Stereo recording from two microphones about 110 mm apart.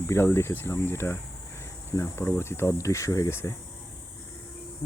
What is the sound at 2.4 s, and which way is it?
Speech, 25° left (ahead or behind).